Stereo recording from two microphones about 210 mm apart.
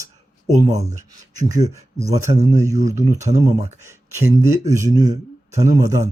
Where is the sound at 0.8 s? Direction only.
15° right (ahead or behind).